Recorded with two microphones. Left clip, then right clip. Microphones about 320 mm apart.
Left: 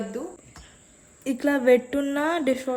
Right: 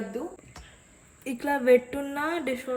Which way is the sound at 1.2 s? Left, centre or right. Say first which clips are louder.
Left 4 dB; centre.